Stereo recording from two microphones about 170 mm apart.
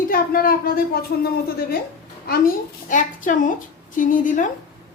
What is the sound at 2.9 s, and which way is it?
A woman's voice, 50° left (ahead or behind).